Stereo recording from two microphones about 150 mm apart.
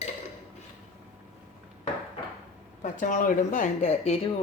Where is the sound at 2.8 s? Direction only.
60° left (ahead or behind).